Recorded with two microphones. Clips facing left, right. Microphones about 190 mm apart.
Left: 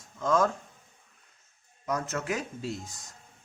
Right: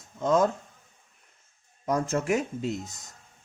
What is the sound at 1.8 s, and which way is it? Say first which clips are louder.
Speech: right 5 dB; 30° right (ahead or behind).